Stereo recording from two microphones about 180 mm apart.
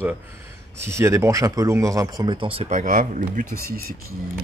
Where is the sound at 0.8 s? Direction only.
15° right (ahead or behind); by 3.8 s 50° right (ahead or behind).